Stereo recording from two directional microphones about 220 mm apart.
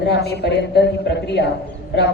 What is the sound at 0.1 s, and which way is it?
A woman's voice, 50° left (ahead or behind).